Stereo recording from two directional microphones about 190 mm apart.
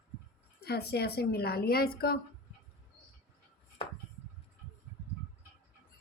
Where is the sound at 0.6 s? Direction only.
55° left (ahead or behind).